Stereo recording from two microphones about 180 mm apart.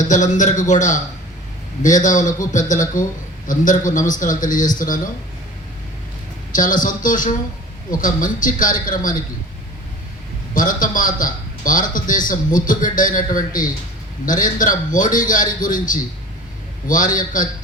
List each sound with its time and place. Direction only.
0.0 s a man's voice: 45° left (ahead or behind)
6.5 s a man's voice: 50° left (ahead or behind)
10.5 s a man's voice: 45° left (ahead or behind)